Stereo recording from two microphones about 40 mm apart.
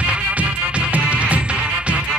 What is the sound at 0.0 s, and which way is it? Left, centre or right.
Music, right.